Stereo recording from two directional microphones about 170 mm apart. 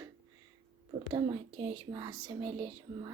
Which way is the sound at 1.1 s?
30° right (ahead or behind).